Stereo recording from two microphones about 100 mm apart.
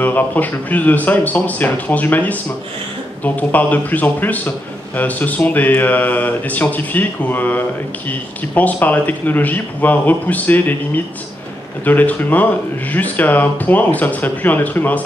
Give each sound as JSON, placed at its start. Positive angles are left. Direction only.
{"t": 0.0, "sound": "a man's voice", "side_deg": 15}
{"t": 3.3, "sound": "a man's voice", "side_deg": 15}
{"t": 11.8, "sound": "a man's voice", "side_deg": 15}